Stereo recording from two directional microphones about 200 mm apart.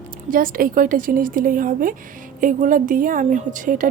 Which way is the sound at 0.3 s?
45° right (ahead or behind).